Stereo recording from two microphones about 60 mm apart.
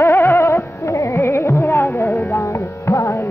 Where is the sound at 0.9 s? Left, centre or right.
Left.